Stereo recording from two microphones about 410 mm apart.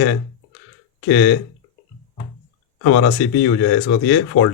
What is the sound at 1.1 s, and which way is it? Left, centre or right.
Speech, left.